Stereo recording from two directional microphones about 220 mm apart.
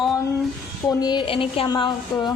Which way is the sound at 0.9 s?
20° left (ahead or behind).